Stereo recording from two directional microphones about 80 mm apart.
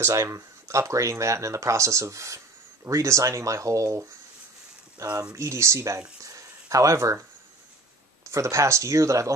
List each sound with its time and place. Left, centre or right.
0.0 s speech: right
4.9 s speech: right
5.3 s speech: right
8.3 s speech: right